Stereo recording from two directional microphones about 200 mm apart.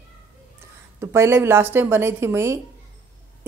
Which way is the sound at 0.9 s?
15° right (ahead or behind).